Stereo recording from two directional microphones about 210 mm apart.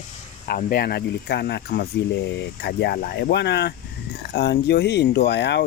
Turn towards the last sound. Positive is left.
turn(degrees=55)  # may be behind; listen again after turning